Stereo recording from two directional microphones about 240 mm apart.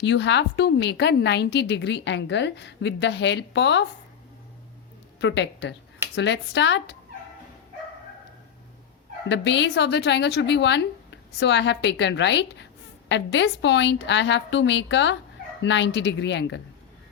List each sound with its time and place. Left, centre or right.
0.0 s a woman's voice: left
5.2 s a woman's voice: left
9.3 s a woman's voice: left